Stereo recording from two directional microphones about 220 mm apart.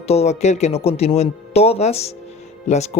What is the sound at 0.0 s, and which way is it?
Speech, 30° left (ahead or behind).